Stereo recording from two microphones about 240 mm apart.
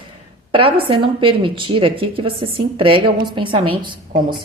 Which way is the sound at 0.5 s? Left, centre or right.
Right.